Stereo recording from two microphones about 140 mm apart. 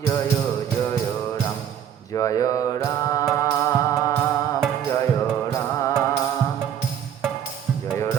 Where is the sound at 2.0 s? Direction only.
25° left (ahead or behind).